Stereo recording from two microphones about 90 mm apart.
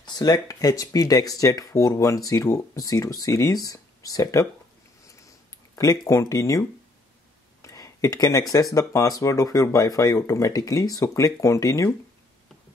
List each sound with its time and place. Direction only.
0.0 s speech: 45° left (ahead or behind)
5.8 s speech: 35° left (ahead or behind)
7.6 s speech: 40° left (ahead or behind)